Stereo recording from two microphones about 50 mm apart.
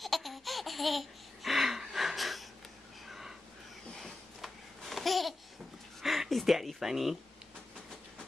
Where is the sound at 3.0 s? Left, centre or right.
Centre.